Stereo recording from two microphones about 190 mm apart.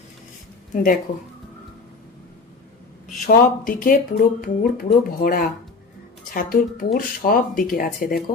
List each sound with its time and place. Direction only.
0.7 s speech: 45° left (ahead or behind)
3.2 s speech: 50° left (ahead or behind)